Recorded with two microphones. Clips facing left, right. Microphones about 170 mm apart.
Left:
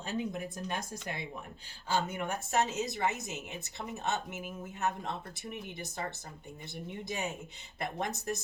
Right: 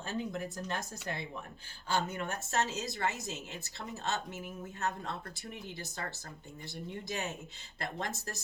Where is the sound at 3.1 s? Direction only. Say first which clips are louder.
Even; 60° left (ahead or behind).